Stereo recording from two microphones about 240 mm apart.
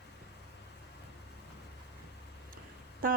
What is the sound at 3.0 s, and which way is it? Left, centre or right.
Speech, right.